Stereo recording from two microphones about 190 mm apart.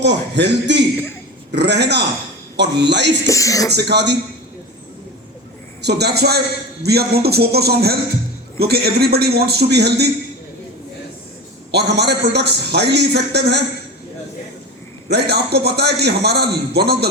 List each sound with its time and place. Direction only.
0.0 s a man's voice: 65° right (ahead or behind)
3.2 s speech: 15° left (ahead or behind)
3.7 s a man's voice: 60° right (ahead or behind)
5.8 s a man's voice: 60° right (ahead or behind)
11.7 s a man's voice: 60° right (ahead or behind)
15.1 s a man's voice: 60° right (ahead or behind)